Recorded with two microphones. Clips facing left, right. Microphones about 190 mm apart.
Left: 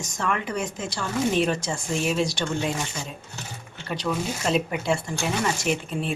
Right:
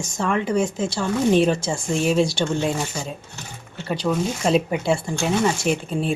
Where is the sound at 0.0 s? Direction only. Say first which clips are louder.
Right 5 dB; 30° right (ahead or behind).